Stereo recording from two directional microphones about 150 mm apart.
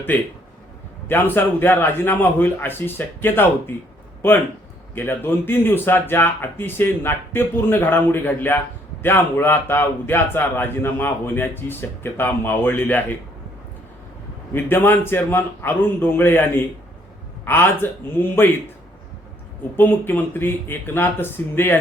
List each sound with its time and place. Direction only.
0.1 s speech: 10° left (ahead or behind)
4.9 s speech: 15° left (ahead or behind)
14.5 s speech: 15° left (ahead or behind)
19.7 s speech: 15° left (ahead or behind)